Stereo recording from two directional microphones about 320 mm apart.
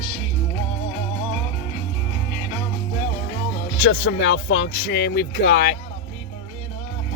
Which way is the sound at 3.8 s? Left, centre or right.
Left.